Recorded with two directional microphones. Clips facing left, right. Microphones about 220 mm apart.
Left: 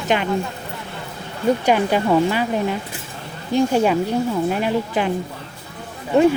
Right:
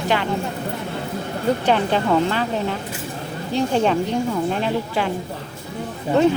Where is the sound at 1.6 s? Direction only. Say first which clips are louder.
Even; 10° left (ahead or behind).